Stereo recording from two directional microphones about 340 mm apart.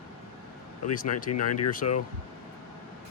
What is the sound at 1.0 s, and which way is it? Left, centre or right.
Speech, left.